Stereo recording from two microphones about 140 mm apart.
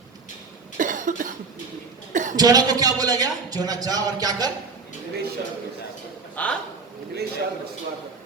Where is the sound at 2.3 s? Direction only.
25° right (ahead or behind).